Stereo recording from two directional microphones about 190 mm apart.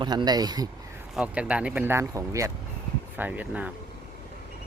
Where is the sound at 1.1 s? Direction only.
5° right (ahead or behind).